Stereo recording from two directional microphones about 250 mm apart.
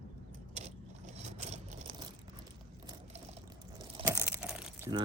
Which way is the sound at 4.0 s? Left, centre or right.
Right.